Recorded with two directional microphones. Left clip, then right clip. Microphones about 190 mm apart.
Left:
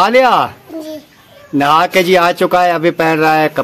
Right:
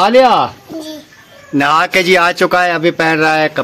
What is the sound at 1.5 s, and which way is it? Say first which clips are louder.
A man's voice: left 1 dB; 5° right (ahead or behind).